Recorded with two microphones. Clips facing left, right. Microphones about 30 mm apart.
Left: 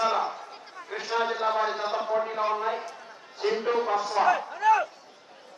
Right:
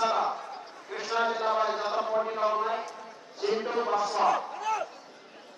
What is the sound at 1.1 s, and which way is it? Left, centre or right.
A man's voice, centre.